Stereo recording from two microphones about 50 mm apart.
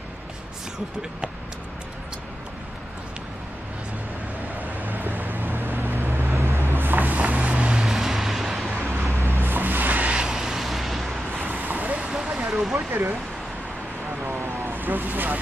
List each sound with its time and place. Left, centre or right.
4.6 s vehicle: right
7.8 s music: centre
8.8 s vehicle: right
9.4 s vehicle: right
10.1 s vehicle: centre
11.3 s vehicle: right
12.3 s vehicle: centre
14.2 s vehicle: right